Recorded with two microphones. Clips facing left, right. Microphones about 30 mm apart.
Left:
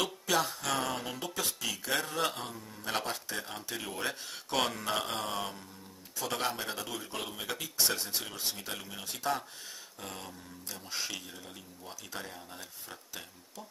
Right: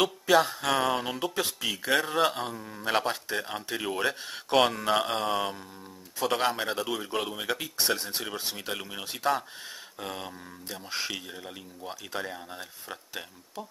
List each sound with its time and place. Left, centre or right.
0.0 s speech: right